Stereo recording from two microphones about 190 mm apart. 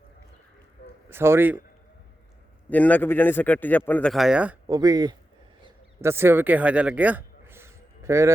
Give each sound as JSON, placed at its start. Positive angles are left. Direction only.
{"t": 1.1, "sound": "a man's voice", "side_deg": -10}
{"t": 2.6, "sound": "a man's voice", "side_deg": 10}
{"t": 4.6, "sound": "speech", "side_deg": -20}
{"t": 5.6, "sound": "a sound", "side_deg": -15}